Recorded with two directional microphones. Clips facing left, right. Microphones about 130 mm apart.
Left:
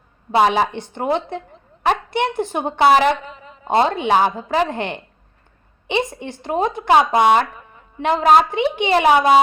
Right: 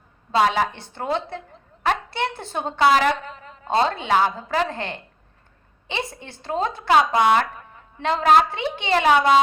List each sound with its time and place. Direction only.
0.3 s speech: 20° left (ahead or behind)
3.2 s a sound: 5° left (ahead or behind)
3.7 s speech: 15° left (ahead or behind)